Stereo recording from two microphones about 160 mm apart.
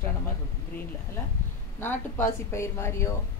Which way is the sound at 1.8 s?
15° left (ahead or behind).